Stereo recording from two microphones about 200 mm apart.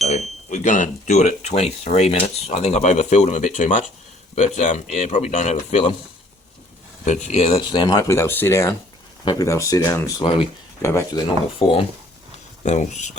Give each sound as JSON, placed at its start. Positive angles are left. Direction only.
{"t": 0.1, "sound": "speech", "side_deg": 35}
{"t": 7.0, "sound": "speech", "side_deg": 35}
{"t": 11.6, "sound": "speech", "side_deg": 25}
{"t": 12.6, "sound": "speech", "side_deg": 35}